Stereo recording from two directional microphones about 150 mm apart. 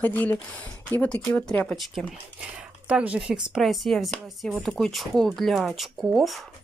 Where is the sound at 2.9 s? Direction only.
10° right (ahead or behind).